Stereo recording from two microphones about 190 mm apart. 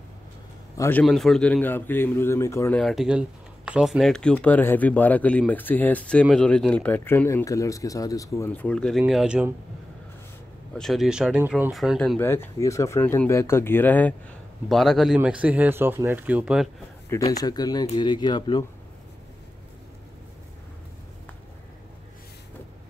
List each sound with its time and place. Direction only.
0.7 s a man's voice: 10° left (ahead or behind)
2.8 s speech: centre (ahead or behind)
10.7 s speech: centre (ahead or behind)
12.2 s speech: 10° left (ahead or behind); by 16.6 s 5° right (ahead or behind)
17.1 s speech: 20° left (ahead or behind)